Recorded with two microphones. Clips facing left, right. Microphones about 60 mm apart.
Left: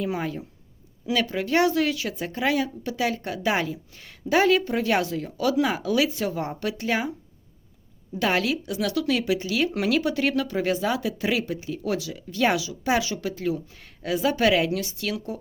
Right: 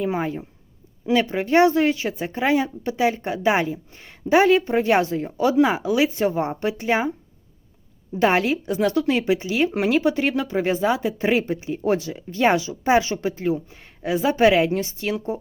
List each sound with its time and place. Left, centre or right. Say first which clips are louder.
0.1 s a woman's voice: right 4 dB; right
8.1 s a woman's voice: right 5 dB; right